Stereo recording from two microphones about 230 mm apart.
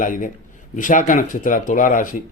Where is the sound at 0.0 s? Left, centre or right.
Left.